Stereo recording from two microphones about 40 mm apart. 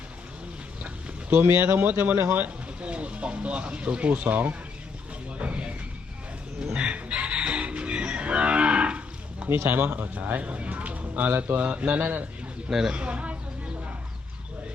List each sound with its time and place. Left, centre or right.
1.8 s speech: right
2.8 s speech: right
5.4 s music: right
6.7 s moo: right
9.5 s speech: right
12.7 s speech: centre
13.0 s speech: right